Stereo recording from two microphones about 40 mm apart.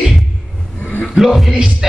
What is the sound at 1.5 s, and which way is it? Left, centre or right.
Speech, centre.